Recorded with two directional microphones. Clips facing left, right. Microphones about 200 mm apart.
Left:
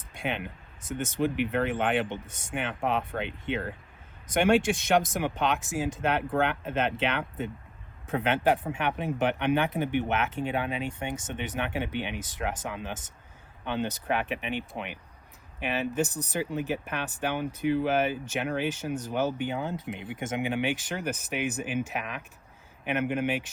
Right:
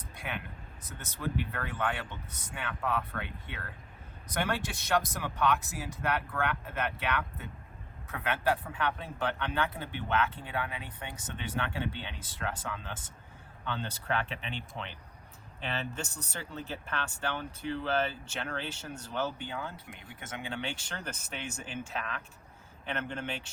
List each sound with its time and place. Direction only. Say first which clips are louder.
0.3 s speech: left 8 dB; 25° left (ahead or behind)
0.8 s speech: left 17 dB; 50° left (ahead or behind)
1.2 s speech: left 8 dB; 20° left (ahead or behind)
15.6 s speech: left 9 dB; 15° left (ahead or behind)